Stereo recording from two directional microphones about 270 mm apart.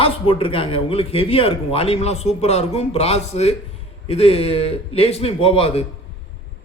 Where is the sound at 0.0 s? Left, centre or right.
Centre.